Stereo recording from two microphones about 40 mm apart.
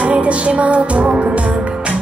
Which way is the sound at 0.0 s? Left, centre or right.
Right.